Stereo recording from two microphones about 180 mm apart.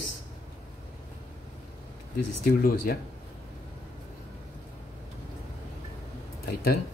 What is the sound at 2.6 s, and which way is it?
Speech, 55° left (ahead or behind).